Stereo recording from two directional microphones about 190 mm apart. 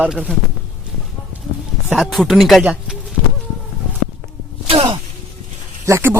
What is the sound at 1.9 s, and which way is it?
A man's voice, centre (ahead or behind).